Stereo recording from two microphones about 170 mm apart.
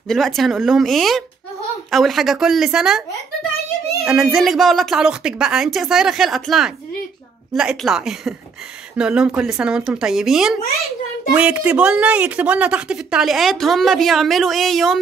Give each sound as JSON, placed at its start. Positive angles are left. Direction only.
{"t": 0.1, "sound": "speech", "side_deg": 0}
{"t": 4.0, "sound": "speech", "side_deg": -5}